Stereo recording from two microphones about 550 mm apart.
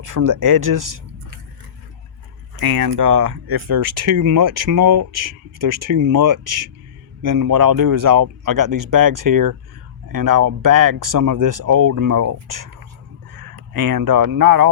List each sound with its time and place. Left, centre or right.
0.0 s speech: right
2.6 s speech: right